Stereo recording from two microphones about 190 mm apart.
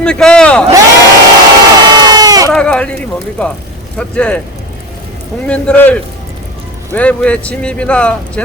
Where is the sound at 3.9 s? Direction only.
5° left (ahead or behind).